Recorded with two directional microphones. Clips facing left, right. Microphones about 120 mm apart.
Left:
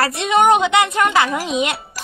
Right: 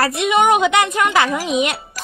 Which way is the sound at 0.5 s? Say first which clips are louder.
Even; 20° left (ahead or behind).